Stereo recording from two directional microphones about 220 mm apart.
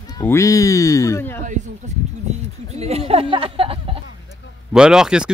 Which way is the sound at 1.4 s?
35° right (ahead or behind).